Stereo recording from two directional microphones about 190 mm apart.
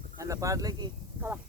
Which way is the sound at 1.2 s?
10° right (ahead or behind).